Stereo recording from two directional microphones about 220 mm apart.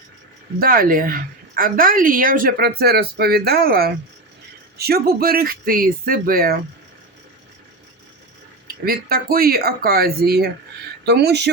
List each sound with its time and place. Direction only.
0.6 s a woman's voice: 40° right (ahead or behind)
8.6 s speech: 40° right (ahead or behind)